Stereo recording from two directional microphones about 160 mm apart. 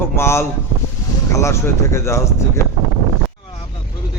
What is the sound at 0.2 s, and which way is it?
A man's voice, 15° left (ahead or behind).